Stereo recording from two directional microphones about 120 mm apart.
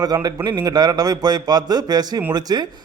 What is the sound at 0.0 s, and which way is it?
A man's voice, 35° right (ahead or behind).